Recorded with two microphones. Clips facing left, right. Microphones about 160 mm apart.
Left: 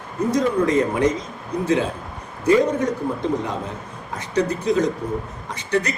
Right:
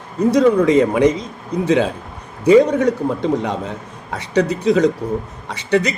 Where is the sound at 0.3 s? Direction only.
80° right.